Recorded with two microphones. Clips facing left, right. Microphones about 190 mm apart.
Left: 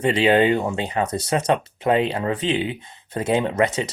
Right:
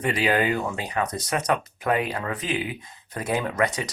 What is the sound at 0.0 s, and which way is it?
Speech, 25° left (ahead or behind).